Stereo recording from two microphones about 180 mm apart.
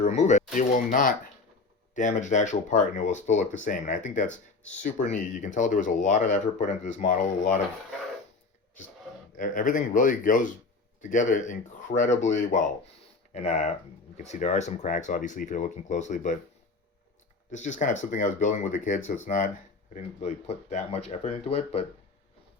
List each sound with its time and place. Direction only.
0.0 s speech: 40° left (ahead or behind)
9.3 s speech: 45° left (ahead or behind)
17.5 s speech: 40° left (ahead or behind)